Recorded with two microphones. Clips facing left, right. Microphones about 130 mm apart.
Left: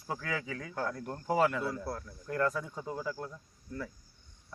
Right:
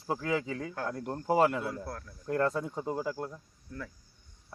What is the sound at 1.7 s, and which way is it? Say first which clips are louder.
Speech: left 2 dB; 5° left (ahead or behind).